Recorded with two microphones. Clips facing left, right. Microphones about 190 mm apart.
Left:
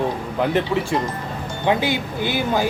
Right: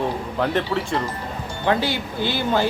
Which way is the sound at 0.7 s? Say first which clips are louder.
Left 2 dB; 10° left (ahead or behind).